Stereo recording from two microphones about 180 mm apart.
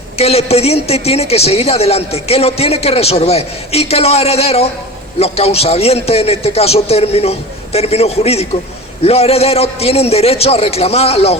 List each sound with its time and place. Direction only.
0.2 s a man's voice: 35° left (ahead or behind)